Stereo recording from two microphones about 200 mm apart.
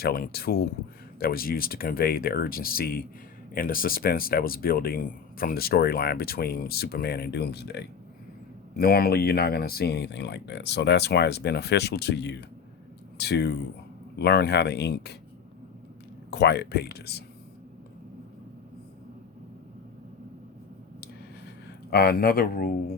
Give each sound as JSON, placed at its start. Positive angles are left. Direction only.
{"t": 0.0, "sound": "speech", "side_deg": 50}
{"t": 16.3, "sound": "speech", "side_deg": 55}
{"t": 21.8, "sound": "speech", "side_deg": 50}